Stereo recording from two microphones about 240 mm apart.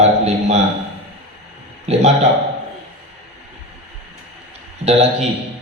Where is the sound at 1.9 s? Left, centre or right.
Right.